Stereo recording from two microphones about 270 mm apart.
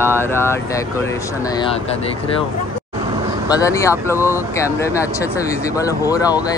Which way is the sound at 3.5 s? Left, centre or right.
Centre.